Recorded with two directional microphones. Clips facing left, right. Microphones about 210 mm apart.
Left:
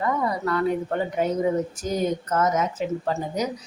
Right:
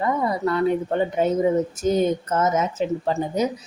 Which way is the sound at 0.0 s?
25° right (ahead or behind).